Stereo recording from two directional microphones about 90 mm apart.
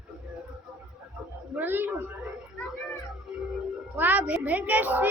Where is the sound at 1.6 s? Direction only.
25° right (ahead or behind).